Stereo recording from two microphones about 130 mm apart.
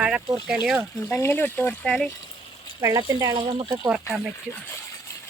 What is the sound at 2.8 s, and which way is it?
Speech, 25° right (ahead or behind).